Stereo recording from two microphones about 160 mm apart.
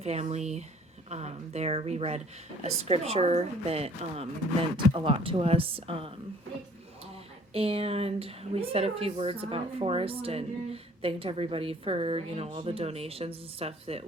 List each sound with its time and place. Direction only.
0.0 s speech: 40° right (ahead or behind)
7.5 s speech: 35° right (ahead or behind)